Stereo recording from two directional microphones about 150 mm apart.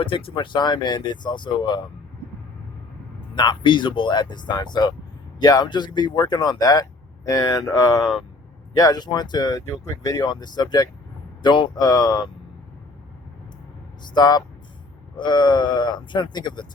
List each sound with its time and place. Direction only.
0.3 s speech: 30° left (ahead or behind)
3.3 s speech: 30° left (ahead or behind)
14.0 s speech: 30° left (ahead or behind)